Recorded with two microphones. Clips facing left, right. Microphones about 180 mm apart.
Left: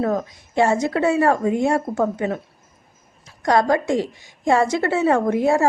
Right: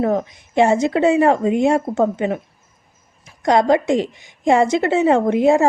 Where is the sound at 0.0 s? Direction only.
20° right (ahead or behind).